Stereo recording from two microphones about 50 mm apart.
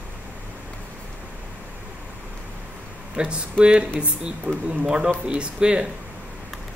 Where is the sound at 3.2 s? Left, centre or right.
Right.